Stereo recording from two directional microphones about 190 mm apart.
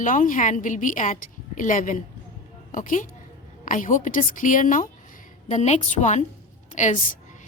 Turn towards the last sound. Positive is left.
turn(degrees=40)  # may be behind; listen again after turning